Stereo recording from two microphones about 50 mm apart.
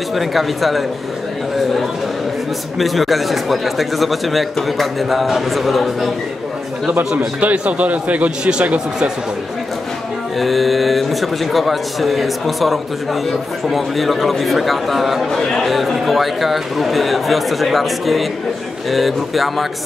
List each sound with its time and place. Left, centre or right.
0.1 s speech: centre
2.8 s speech: centre
7.3 s a man's voice: right
8.5 s a man's voice: centre
10.4 s speech: centre